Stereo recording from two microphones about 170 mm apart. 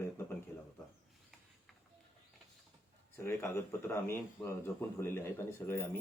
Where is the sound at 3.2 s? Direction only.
15° left (ahead or behind).